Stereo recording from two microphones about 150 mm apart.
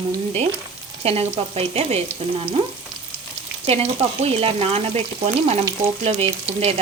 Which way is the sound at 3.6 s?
45° right (ahead or behind).